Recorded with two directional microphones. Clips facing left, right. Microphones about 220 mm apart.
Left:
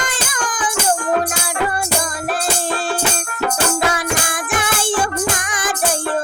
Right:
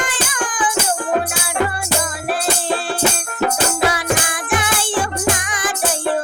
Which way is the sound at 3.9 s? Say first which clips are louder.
Right 1 dB; 45° left (ahead or behind).